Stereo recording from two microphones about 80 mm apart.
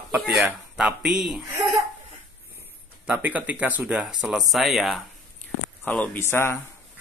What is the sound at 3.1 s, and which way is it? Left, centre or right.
Speech, centre.